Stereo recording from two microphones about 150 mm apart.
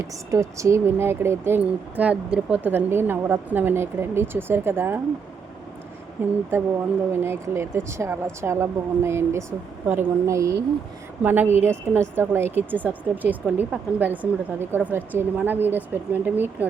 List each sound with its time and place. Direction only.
0.3 s speech: 20° right (ahead or behind)
6.5 s speech: 15° right (ahead or behind)